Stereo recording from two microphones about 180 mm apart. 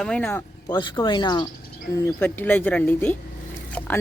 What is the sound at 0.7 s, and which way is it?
Speech, 25° left (ahead or behind).